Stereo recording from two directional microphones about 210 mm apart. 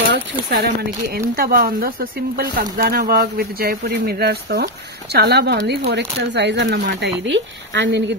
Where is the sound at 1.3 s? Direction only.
45° right (ahead or behind).